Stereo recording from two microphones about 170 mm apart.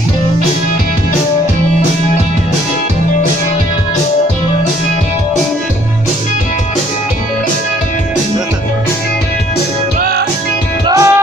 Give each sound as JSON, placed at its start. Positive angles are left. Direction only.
{"t": 10.9, "sound": "music", "side_deg": -20}